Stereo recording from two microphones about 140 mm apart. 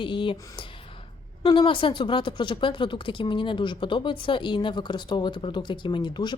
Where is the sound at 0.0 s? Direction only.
35° left (ahead or behind).